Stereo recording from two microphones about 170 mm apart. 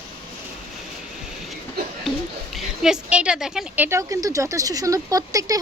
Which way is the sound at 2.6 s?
5° right (ahead or behind).